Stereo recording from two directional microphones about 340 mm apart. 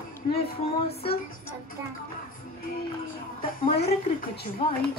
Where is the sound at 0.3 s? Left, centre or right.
Left.